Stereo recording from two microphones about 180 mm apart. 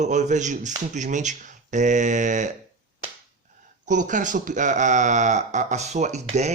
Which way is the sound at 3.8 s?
45° right (ahead or behind).